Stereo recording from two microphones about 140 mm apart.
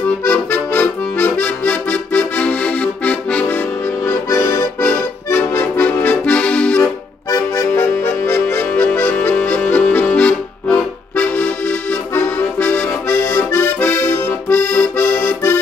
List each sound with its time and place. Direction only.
0.2 s accordion: 15° left (ahead or behind)
7.2 s accordion: 25° left (ahead or behind)